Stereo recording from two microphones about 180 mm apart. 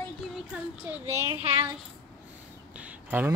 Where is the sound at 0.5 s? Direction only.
10° right (ahead or behind).